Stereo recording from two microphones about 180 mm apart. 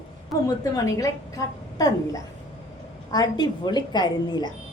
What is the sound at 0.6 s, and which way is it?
Speech, 20° left (ahead or behind).